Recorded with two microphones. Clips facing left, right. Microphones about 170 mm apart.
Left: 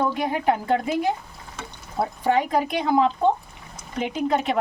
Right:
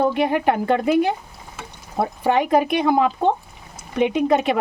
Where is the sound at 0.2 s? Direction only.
65° right (ahead or behind).